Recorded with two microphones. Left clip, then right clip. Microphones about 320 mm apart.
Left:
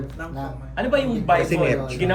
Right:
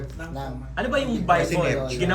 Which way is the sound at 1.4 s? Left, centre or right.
Centre.